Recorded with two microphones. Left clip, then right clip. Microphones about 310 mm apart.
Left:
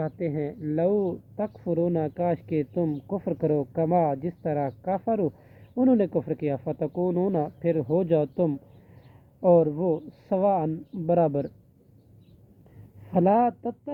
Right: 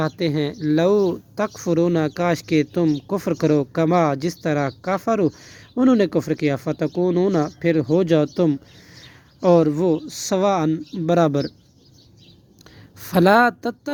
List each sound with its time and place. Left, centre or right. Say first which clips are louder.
0.0 s speech: right 7 dB; right
9.4 s speech: right 4 dB; right
13.1 s speech: right 7 dB; right